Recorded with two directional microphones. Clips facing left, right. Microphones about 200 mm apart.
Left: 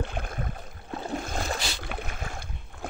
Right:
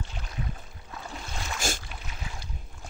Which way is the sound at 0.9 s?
45° left (ahead or behind).